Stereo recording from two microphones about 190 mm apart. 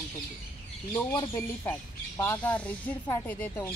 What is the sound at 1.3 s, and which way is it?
Speech, 10° left (ahead or behind).